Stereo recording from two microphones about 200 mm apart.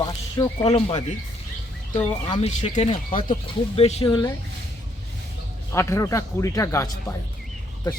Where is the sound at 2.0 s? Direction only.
25° left (ahead or behind).